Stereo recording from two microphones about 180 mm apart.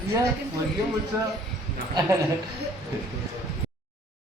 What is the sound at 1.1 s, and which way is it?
Speech, 15° right (ahead or behind).